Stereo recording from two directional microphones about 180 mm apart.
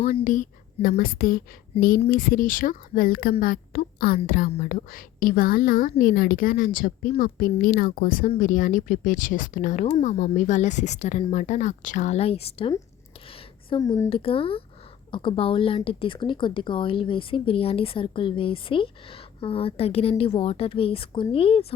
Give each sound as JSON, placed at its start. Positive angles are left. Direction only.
{"t": 0.3, "sound": "a woman's voice", "side_deg": 50}
{"t": 13.7, "sound": "a woman's voice", "side_deg": 20}
{"t": 14.1, "sound": "speech", "side_deg": 30}